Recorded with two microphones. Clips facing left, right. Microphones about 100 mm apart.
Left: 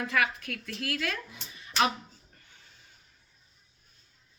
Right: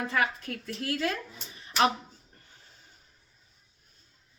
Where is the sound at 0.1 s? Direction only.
30° right (ahead or behind).